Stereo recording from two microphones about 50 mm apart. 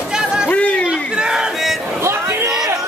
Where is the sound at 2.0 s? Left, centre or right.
Right.